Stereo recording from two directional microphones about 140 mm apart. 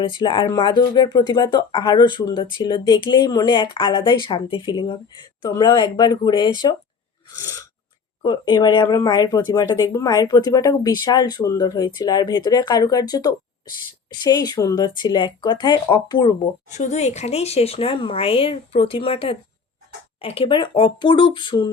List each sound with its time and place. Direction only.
0.0 s speech: 35° left (ahead or behind)
16.6 s speech: 55° left (ahead or behind); by 21.7 s 35° left (ahead or behind)